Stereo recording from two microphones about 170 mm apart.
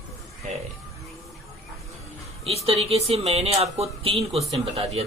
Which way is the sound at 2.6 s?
35° right (ahead or behind).